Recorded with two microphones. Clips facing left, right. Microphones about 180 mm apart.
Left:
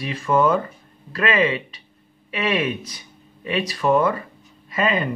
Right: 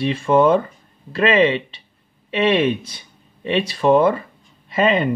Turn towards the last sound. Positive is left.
turn(degrees=-25)  # may be behind; listen again after turning